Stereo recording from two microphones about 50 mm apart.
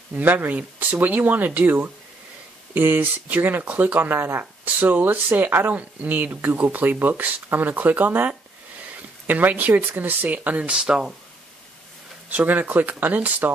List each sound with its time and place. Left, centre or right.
0.1 s speech: right
5.7 s speech: right
9.3 s speech: right
10.8 s speech: centre
12.3 s speech: right